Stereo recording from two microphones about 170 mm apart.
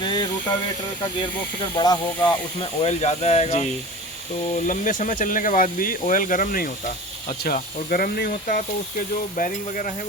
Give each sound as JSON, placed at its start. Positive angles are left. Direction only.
{"t": 0.0, "sound": "hiss", "side_deg": 25}
{"t": 1.7, "sound": "speech", "side_deg": 25}
{"t": 2.6, "sound": "speech", "side_deg": 40}